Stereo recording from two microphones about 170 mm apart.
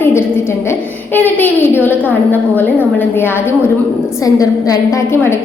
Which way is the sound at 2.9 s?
15° left (ahead or behind).